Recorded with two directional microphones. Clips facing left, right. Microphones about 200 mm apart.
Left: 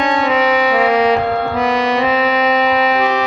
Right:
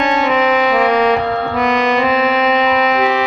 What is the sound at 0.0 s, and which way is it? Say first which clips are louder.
Music: right 1 dB; centre (ahead or behind).